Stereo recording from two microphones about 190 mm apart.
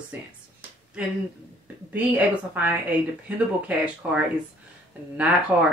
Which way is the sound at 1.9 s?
10° right (ahead or behind).